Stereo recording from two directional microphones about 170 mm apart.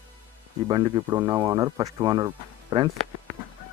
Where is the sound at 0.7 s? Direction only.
25° right (ahead or behind).